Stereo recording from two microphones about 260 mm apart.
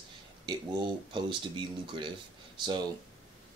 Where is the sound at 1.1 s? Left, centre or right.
Centre.